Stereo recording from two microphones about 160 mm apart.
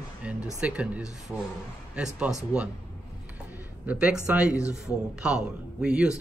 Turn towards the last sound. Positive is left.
turn(degrees=-5)  # may be behind; listen again after turning